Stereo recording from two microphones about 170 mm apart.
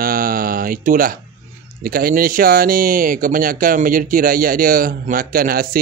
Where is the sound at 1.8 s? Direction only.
60° right (ahead or behind).